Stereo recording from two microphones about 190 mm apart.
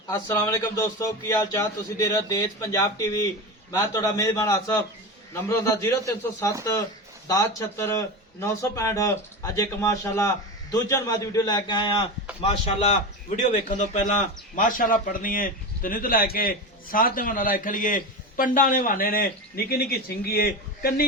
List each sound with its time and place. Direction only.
0.1 s a man's voice: 15° left (ahead or behind)
7.3 s a man's voice: 15° left (ahead or behind); by 21.1 s 55° left (ahead or behind)